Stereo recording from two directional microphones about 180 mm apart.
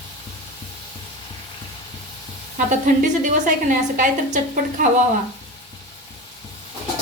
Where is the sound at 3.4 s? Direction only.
45° right (ahead or behind).